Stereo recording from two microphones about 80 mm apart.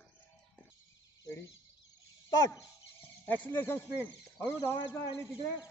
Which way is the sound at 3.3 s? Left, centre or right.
Left.